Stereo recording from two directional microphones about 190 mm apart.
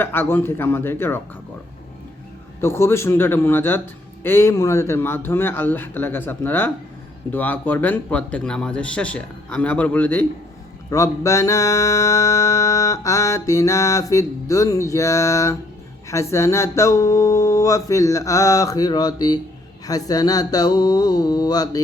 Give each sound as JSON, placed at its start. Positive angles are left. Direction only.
{"t": 0.0, "sound": "music", "side_deg": 10}
{"t": 2.6, "sound": "music", "side_deg": 15}
{"t": 19.9, "sound": "speech", "side_deg": 20}